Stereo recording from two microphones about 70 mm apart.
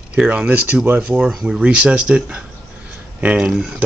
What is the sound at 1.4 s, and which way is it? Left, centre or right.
Speech, centre.